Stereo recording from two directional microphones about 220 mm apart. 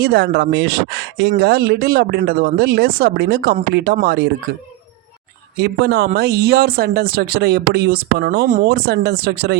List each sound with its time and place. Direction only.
0.0 s speech: 50° right (ahead or behind)